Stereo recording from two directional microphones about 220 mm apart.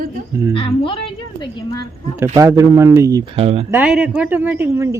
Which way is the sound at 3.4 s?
25° right (ahead or behind).